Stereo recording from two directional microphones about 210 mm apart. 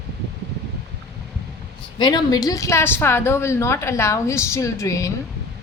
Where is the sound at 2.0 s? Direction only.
20° left (ahead or behind).